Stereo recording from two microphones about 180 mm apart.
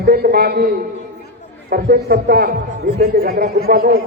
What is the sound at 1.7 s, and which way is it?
A man's voice, 55° right (ahead or behind).